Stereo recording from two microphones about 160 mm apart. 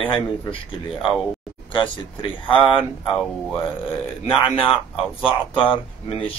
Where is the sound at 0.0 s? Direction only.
30° left (ahead or behind).